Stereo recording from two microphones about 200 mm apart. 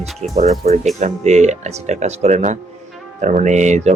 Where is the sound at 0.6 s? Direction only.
50° right (ahead or behind).